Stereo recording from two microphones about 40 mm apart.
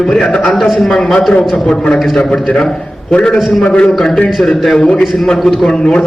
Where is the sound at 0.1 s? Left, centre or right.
Centre.